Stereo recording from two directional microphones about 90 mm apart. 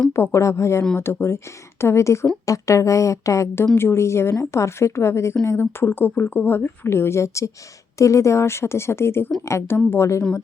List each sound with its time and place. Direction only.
0.1 s a woman's voice: 30° left (ahead or behind)